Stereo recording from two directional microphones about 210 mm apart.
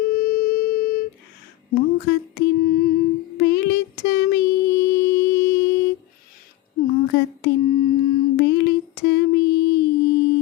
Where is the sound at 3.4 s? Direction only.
55° left (ahead or behind).